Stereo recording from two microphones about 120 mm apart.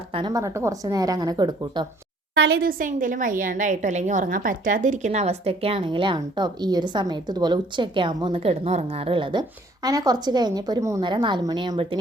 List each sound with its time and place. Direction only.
0.1 s a woman's voice: 45° right (ahead or behind)
0.3 s a woman's voice: 25° right (ahead or behind)
2.8 s a woman's voice: 90° right; by 11.0 s 25° right (ahead or behind)
11.0 s a woman's voice: 40° right (ahead or behind)